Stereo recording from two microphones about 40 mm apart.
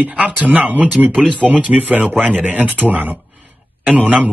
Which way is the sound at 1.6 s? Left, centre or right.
Right.